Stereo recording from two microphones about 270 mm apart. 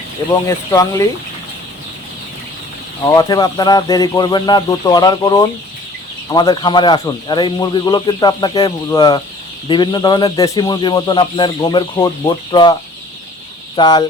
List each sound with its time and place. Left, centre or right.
0.3 s speech: centre
3.0 s speech: centre
13.7 s speech: centre